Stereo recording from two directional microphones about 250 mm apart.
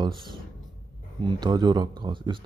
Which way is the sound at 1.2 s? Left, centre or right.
Centre.